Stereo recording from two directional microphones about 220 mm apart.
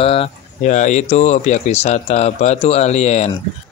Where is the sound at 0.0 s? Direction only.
25° left (ahead or behind).